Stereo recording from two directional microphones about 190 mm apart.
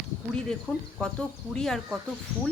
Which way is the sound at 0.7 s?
10° left (ahead or behind).